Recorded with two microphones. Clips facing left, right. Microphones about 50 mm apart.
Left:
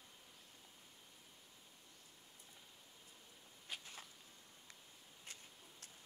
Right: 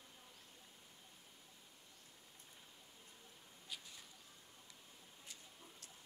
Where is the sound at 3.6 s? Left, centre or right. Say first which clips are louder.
Left 3 dB; left.